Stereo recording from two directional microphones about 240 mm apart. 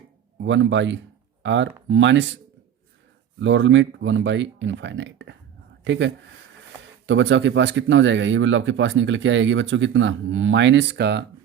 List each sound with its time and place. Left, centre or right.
0.4 s speech: right
3.4 s speech: right
7.1 s speech: right